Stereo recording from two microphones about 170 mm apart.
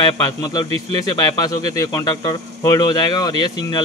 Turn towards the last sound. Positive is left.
turn(degrees=25)  # may be behind; listen again after turning